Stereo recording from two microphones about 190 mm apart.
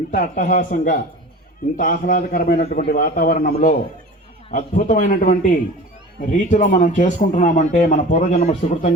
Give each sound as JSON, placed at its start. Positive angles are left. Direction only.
{"t": 0.1, "sound": "a man's voice", "side_deg": 45}